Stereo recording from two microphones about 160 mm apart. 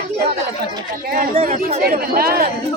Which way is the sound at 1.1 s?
60° right (ahead or behind).